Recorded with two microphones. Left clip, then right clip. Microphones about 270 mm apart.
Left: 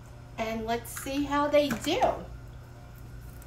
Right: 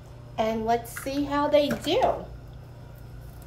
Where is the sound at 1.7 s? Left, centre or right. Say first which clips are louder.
Right 3 dB; centre.